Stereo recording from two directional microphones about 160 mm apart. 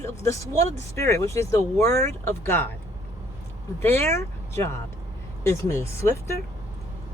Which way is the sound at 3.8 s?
15° left (ahead or behind).